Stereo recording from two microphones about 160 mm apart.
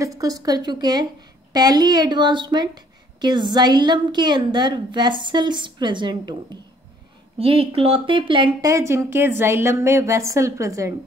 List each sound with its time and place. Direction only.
0.0 s a woman's voice: 20° right (ahead or behind)
7.3 s a woman's voice: 35° right (ahead or behind); by 10.9 s 20° right (ahead or behind)